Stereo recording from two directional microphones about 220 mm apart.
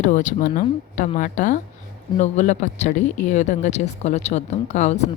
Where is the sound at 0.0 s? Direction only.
35° left (ahead or behind).